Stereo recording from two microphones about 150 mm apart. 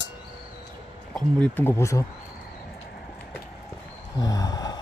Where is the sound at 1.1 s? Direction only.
10° left (ahead or behind).